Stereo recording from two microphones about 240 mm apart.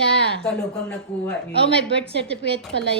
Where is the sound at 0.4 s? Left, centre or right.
Centre.